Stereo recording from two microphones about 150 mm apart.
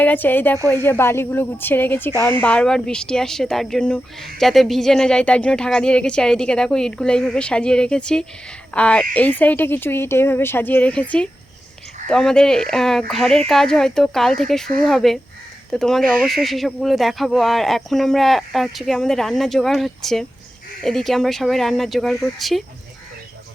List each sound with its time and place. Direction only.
0.0 s a woman's voice: 10° left (ahead or behind)